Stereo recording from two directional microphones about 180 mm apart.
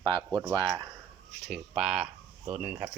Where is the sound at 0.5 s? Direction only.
25° right (ahead or behind).